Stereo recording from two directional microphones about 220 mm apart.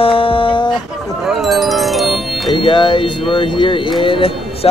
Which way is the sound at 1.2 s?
Centre (ahead or behind).